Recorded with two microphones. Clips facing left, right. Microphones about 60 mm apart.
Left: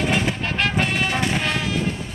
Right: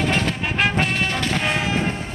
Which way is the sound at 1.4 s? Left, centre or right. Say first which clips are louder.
Right 2 dB; right.